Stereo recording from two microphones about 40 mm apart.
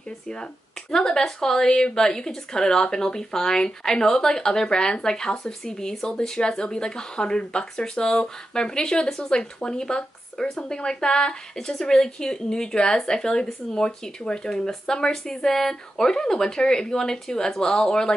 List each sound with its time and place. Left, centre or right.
0.9 s speech: centre